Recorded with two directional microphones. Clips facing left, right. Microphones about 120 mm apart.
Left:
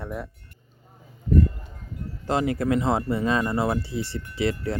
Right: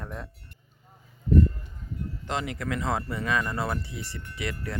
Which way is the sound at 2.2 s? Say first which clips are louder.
Left 9 dB; 35° left (ahead or behind).